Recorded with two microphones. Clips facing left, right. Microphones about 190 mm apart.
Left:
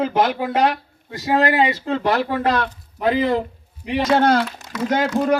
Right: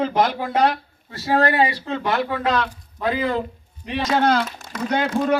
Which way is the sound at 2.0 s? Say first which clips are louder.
Left 2 dB; 40° left (ahead or behind).